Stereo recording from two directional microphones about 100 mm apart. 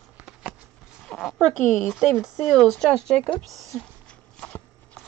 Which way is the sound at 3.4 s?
Centre (ahead or behind).